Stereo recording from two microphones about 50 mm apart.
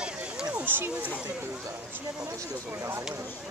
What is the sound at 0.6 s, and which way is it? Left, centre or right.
Speech, right.